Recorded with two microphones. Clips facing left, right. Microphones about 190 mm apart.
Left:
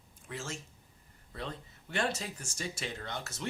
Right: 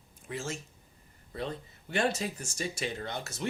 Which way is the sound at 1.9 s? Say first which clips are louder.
Right 4 dB; 15° right (ahead or behind).